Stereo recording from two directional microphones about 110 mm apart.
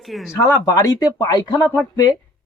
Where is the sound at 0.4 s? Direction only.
25° left (ahead or behind).